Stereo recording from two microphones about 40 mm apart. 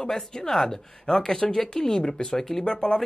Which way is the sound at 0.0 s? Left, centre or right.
Centre.